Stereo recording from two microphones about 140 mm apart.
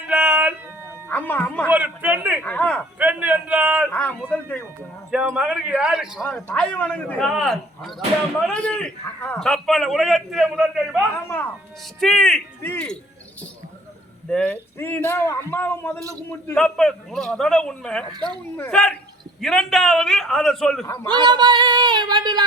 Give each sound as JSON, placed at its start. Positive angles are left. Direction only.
{"t": 0.1, "sound": "music", "side_deg": -10}
{"t": 1.0, "sound": "music", "side_deg": 15}
{"t": 1.6, "sound": "a sound", "side_deg": -10}
{"t": 2.4, "sound": "a sound", "side_deg": 10}
{"t": 3.0, "sound": "a sound", "side_deg": -10}
{"t": 3.9, "sound": "a sound", "side_deg": 10}
{"t": 5.1, "sound": "a man's voice", "side_deg": -5}
{"t": 6.2, "sound": "a man's voice", "side_deg": 10}
{"t": 11.1, "sound": "speech", "side_deg": 15}
{"t": 11.9, "sound": "a man's voice", "side_deg": 5}
{"t": 14.3, "sound": "a man's voice", "side_deg": 10}
{"t": 20.8, "sound": "a man's voice", "side_deg": 20}
{"t": 21.1, "sound": "female singing", "side_deg": -30}